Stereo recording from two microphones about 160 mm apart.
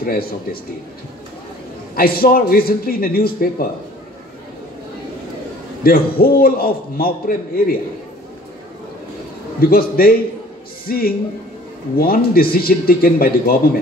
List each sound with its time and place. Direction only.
0.0 s a man's voice: 70° left (ahead or behind)
2.0 s a man's voice: 70° left (ahead or behind)
5.9 s a man's voice: 70° left (ahead or behind)
9.6 s a man's voice: 70° left (ahead or behind)